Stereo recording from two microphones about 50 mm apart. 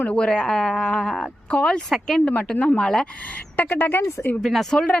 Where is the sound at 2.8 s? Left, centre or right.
Centre.